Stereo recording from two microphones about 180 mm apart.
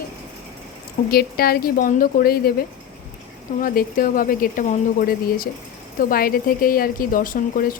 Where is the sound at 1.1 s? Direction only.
60° left (ahead or behind).